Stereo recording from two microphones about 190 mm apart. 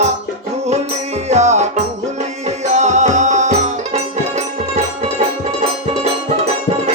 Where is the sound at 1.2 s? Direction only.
35° right (ahead or behind).